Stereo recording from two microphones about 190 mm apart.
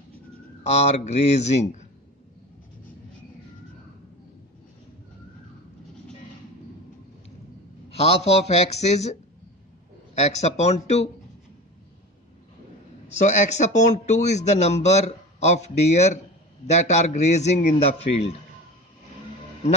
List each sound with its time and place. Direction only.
0.7 s speech: 35° left (ahead or behind)
7.9 s speech: 30° left (ahead or behind)
10.1 s speech: 35° left (ahead or behind)
13.1 s speech: 40° left (ahead or behind)